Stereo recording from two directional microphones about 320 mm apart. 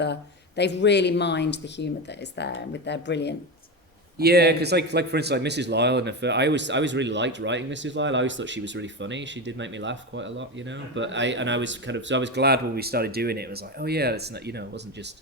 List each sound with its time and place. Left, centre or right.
0.0 s speech: left
4.2 s speech: right